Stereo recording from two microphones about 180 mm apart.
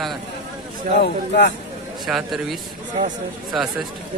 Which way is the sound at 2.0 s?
Centre (ahead or behind).